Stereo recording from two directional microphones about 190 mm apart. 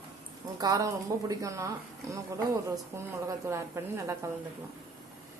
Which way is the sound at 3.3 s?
15° right (ahead or behind).